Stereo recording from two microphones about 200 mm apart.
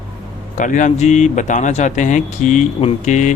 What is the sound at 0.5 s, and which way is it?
Speech, 40° left (ahead or behind).